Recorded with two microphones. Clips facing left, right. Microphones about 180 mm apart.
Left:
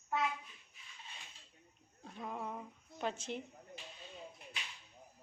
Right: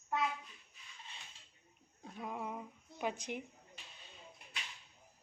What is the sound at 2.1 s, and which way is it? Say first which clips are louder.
Speech: even; 10° right (ahead or behind).